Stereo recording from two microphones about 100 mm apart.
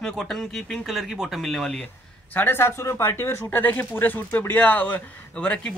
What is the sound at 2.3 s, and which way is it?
Speech, 20° left (ahead or behind).